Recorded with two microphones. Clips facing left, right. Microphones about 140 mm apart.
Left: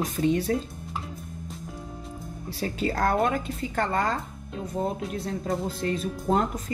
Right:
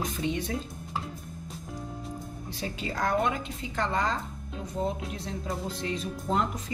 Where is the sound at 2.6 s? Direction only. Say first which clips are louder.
Left 5 dB; 55° left (ahead or behind).